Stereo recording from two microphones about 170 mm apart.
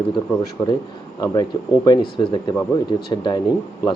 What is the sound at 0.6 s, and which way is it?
Speech, 20° left (ahead or behind).